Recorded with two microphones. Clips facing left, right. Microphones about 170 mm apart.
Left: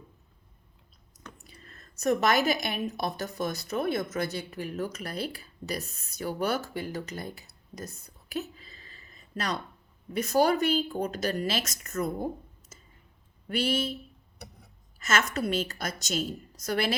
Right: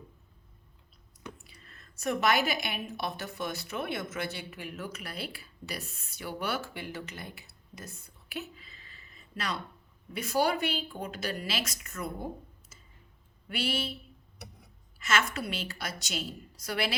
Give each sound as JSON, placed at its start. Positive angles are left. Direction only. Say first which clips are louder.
{"t": 1.5, "sound": "a woman's voice", "louder": "left 4 dB", "side_deg": 40}